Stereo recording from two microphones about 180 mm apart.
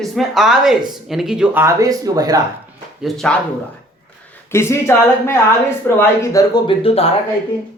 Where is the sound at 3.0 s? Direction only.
5° left (ahead or behind).